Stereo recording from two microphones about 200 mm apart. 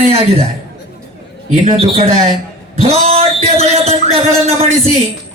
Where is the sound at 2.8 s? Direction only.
30° right (ahead or behind).